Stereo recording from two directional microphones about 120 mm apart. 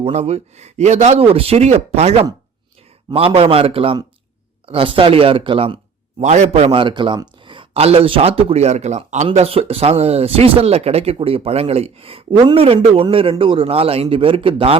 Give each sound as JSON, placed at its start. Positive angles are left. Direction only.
{"t": 0.0, "sound": "speech", "side_deg": -60}
{"t": 3.1, "sound": "speech", "side_deg": -50}
{"t": 6.2, "sound": "speech", "side_deg": -70}